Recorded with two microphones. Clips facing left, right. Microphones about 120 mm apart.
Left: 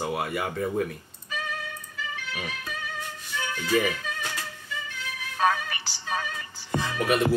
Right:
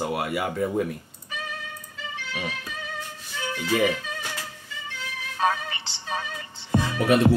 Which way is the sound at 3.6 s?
20° right (ahead or behind).